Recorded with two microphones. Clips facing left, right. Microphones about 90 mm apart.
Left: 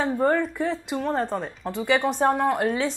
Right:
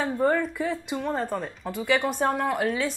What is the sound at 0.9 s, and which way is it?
Speech, 20° left (ahead or behind).